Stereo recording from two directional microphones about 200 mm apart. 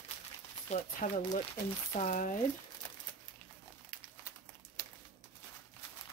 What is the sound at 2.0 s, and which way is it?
Speech, 40° left (ahead or behind).